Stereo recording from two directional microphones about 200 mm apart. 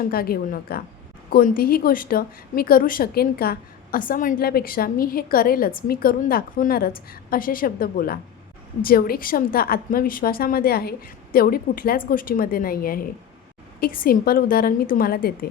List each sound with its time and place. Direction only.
0.1 s a woman's voice: 50° left (ahead or behind)